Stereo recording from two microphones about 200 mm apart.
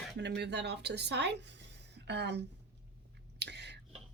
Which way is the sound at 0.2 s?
60° right (ahead or behind).